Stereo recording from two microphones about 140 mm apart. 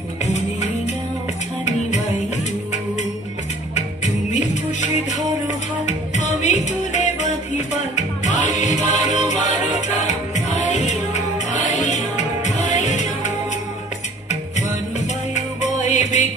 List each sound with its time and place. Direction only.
1.7 s music: 55° left (ahead or behind)
3.7 s music: 55° left (ahead or behind)
15.3 s music: 55° left (ahead or behind)